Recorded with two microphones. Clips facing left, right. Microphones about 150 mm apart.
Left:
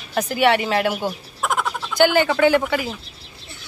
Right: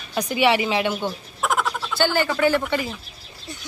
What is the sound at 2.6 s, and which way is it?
Speech, 5° left (ahead or behind).